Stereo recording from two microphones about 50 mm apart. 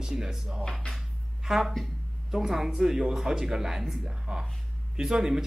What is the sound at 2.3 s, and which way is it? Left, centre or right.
Speech, centre.